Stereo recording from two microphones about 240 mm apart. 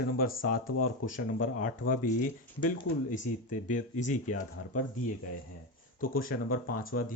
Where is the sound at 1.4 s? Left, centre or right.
Left.